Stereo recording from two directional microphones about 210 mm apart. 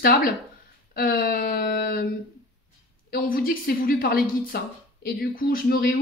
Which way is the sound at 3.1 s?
45° left (ahead or behind).